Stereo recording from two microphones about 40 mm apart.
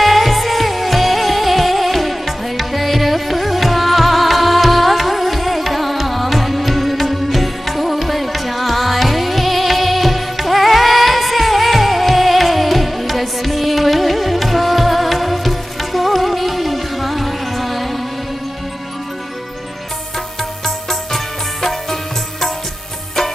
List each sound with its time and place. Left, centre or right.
0.0 s music: centre
20.6 s music: centre